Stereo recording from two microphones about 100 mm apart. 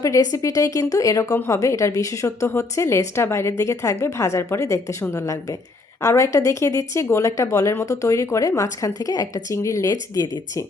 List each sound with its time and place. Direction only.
0.0 s a woman's voice: 35° left (ahead or behind)